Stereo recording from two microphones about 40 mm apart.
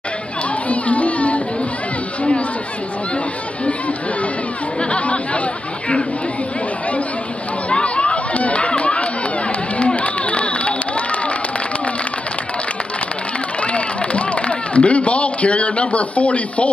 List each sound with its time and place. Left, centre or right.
0.7 s a sound: left
4.9 s speech: left
7.7 s chatter: left
13.7 s a man's voice: left